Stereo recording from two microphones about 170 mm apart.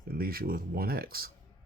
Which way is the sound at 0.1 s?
60° right (ahead or behind).